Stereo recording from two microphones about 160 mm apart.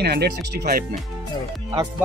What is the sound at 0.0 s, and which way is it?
Speech, 90° right.